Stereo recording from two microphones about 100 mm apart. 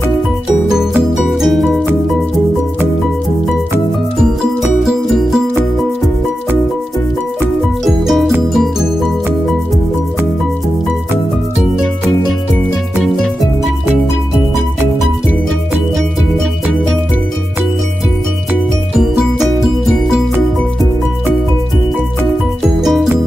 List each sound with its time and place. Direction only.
0.7 s music: 5° right (ahead or behind)
7.8 s music: centre (ahead or behind)
13.0 s music: 5° left (ahead or behind)
22.6 s music: 5° right (ahead or behind)